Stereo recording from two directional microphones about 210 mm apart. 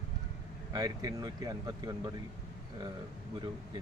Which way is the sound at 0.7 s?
15° right (ahead or behind).